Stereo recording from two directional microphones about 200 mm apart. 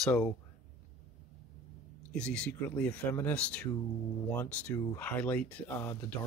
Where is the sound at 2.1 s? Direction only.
5° left (ahead or behind).